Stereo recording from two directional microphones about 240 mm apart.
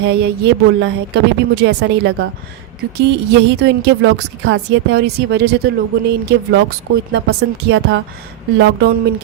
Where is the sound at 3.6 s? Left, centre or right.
Right.